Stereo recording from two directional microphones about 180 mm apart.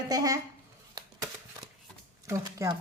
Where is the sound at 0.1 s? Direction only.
20° right (ahead or behind).